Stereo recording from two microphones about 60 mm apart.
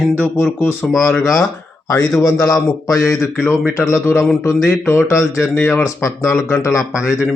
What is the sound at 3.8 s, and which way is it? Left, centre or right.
Speech, left.